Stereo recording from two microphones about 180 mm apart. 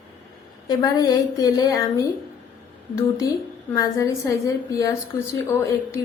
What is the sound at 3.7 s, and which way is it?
Speech, 20° left (ahead or behind).